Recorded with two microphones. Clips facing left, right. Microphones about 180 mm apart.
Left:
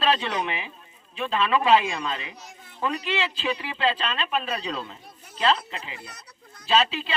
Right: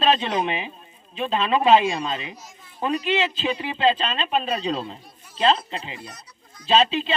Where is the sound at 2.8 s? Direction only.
20° right (ahead or behind).